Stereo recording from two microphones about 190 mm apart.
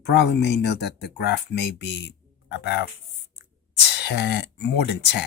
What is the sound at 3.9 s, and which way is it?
Speech, 60° left (ahead or behind).